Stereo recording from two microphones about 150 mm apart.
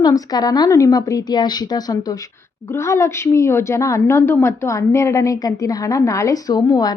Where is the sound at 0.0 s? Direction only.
25° left (ahead or behind).